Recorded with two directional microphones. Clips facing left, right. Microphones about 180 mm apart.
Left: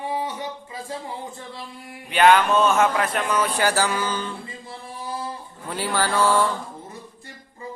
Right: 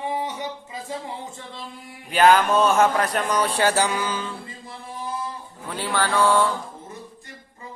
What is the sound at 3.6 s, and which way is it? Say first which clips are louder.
Music: right 1 dB; 20° right (ahead or behind).